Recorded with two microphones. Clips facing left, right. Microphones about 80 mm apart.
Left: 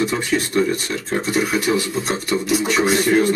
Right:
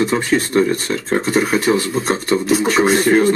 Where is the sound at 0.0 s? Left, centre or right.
Right.